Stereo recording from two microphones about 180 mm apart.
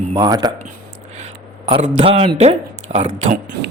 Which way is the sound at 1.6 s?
30° right (ahead or behind).